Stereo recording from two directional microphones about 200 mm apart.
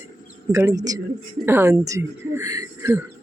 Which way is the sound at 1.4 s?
10° right (ahead or behind).